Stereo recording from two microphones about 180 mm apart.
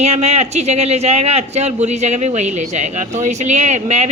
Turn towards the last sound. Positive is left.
turn(degrees=-40)  # may be behind; listen again after turning